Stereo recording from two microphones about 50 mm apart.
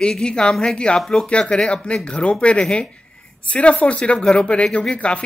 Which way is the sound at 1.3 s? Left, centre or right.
Centre.